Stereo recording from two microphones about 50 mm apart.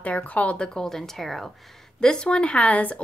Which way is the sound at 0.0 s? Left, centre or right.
Left.